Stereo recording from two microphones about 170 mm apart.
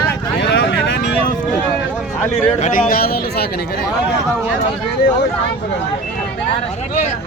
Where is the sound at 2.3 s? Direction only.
50° left (ahead or behind); by 3.4 s 65° left (ahead or behind).